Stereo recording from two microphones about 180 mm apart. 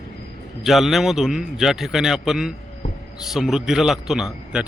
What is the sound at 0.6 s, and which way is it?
A man's voice, centre (ahead or behind).